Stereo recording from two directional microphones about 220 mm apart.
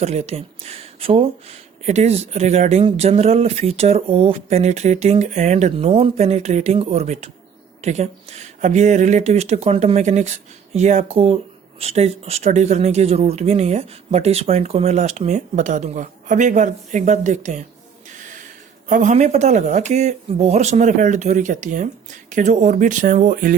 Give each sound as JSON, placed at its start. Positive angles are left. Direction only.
{"t": 0.0, "sound": "speech", "side_deg": -30}
{"t": 18.9, "sound": "speech", "side_deg": -35}